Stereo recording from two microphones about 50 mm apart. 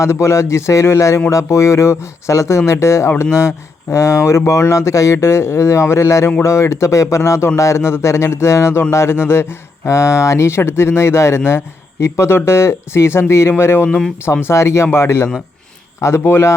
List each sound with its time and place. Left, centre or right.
0.0 s speech: left
3.2 s speech: left
6.4 s speech: left
14.4 s speech: left
14.9 s speech: left